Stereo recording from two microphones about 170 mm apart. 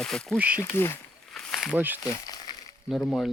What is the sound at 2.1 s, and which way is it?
Crumpling, 25° left (ahead or behind).